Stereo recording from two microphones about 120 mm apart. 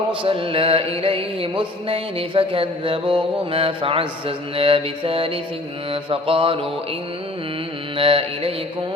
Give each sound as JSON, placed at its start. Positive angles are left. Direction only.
{"t": 0.2, "sound": "mantra", "side_deg": -50}
{"t": 7.9, "sound": "mantra", "side_deg": -50}